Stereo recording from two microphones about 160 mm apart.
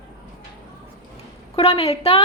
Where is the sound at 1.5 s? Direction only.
40° left (ahead or behind).